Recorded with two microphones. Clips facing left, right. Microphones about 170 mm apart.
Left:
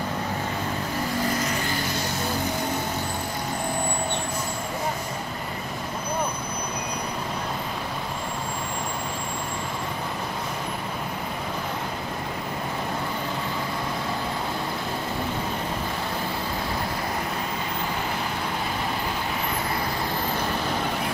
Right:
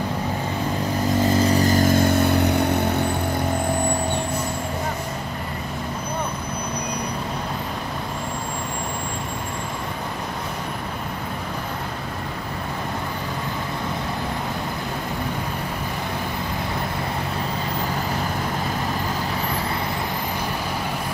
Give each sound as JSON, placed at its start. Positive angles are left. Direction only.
{"t": 1.2, "sound": "vehicle", "side_deg": -30}